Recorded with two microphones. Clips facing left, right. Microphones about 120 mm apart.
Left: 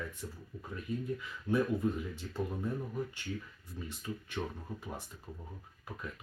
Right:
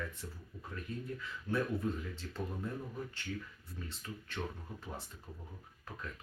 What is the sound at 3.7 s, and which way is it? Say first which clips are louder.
Speech: left 5 dB; 15° left (ahead or behind).